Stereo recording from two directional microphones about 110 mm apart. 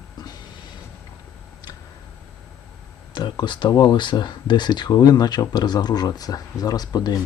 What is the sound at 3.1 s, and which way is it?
Speech, 40° left (ahead or behind).